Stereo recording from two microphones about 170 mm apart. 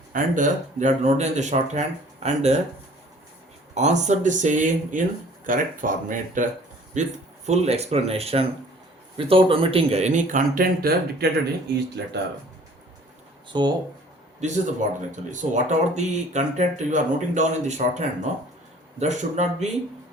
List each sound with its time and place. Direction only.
0.1 s speech: 50° right (ahead or behind)
3.8 s speech: 45° right (ahead or behind); by 11.3 s 60° right (ahead or behind)
13.5 s speech: 25° right (ahead or behind)
14.4 s speech: 45° right (ahead or behind)